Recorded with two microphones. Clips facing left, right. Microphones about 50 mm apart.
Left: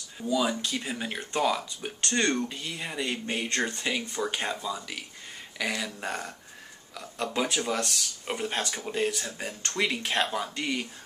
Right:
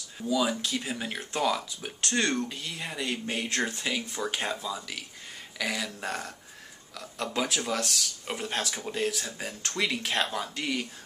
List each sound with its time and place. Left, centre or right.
0.2 s speech: centre